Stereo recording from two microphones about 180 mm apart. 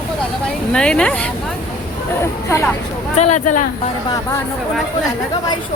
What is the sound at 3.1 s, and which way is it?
Speech, 40° left (ahead or behind).